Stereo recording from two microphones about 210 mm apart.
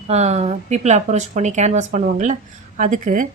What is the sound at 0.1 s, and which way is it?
Speech, 30° right (ahead or behind).